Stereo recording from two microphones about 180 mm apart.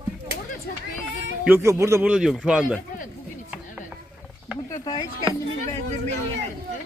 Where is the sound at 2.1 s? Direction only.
Centre (ahead or behind).